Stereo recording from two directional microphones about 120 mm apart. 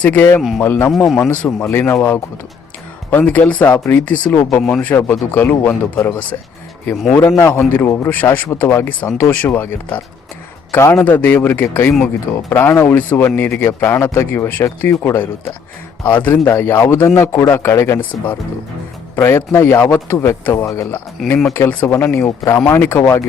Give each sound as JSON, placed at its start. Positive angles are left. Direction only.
{"t": 0.0, "sound": "a man's voice", "side_deg": 15}
{"t": 0.9, "sound": "a man's voice", "side_deg": 0}
{"t": 1.5, "sound": "a man's voice", "side_deg": 20}
{"t": 21.2, "sound": "a man's voice", "side_deg": 0}
{"t": 21.5, "sound": "a man's voice", "side_deg": 20}